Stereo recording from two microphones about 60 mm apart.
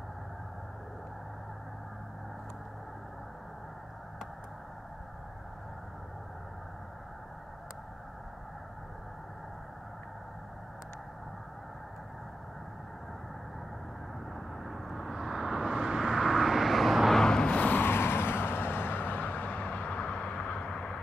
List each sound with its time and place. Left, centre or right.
14.6 s vehicle: centre
17.2 s vehicle: centre
17.5 s vehicle: left